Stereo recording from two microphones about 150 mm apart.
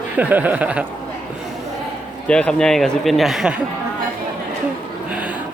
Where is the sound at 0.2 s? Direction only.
10° right (ahead or behind).